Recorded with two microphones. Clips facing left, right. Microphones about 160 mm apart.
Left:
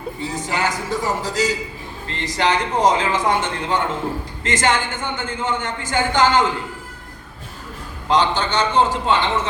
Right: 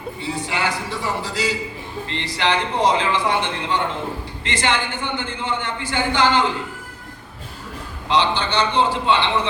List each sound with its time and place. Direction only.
0.2 s a man's voice: 40° left (ahead or behind)
8.0 s a man's voice: 45° left (ahead or behind)